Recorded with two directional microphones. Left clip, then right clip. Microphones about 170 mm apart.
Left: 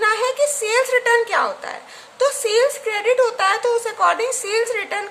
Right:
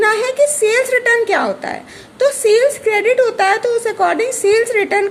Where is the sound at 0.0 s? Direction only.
15° right (ahead or behind).